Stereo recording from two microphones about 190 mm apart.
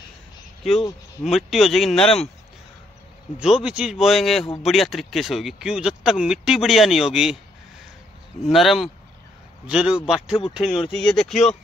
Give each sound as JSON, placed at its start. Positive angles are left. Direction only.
{"t": 1.2, "sound": "speech", "side_deg": 0}
{"t": 3.3, "sound": "speech", "side_deg": -5}
{"t": 8.5, "sound": "speech", "side_deg": 0}